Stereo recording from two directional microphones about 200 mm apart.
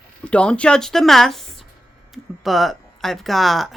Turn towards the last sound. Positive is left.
turn(degrees=0)  # may be behind; listen again after turning